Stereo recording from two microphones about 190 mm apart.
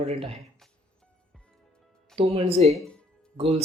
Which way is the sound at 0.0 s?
35° right (ahead or behind).